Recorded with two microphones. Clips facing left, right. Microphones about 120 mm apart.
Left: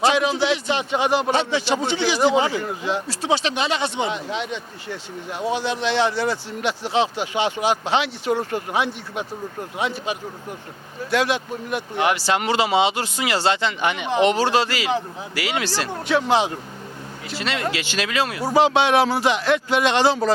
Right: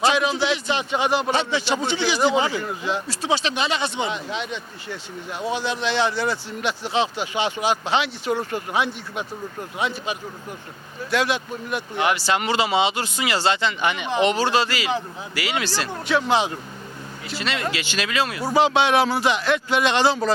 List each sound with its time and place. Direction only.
0.0 s a man's voice: 60° left (ahead or behind)
6.1 s a man's voice: 40° left (ahead or behind)
8.3 s a man's voice: 40° left (ahead or behind)
17.2 s speech: 55° left (ahead or behind)